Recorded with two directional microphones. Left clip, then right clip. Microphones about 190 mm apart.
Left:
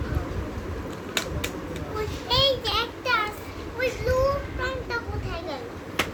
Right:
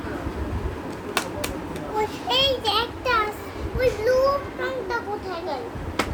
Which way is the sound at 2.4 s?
40° right (ahead or behind).